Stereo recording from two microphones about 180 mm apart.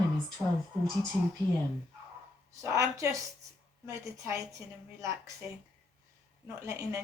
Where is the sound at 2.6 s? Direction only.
15° right (ahead or behind).